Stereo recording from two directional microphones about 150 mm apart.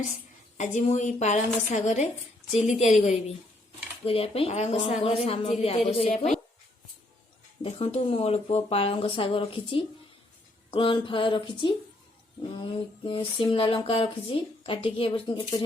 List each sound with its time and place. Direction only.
0.5 s a woman's voice: 55° left (ahead or behind)
4.0 s speech: 40° left (ahead or behind)
7.6 s speech: 40° left (ahead or behind)